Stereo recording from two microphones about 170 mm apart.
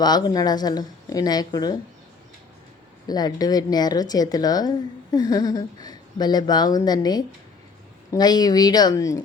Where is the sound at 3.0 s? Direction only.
25° left (ahead or behind).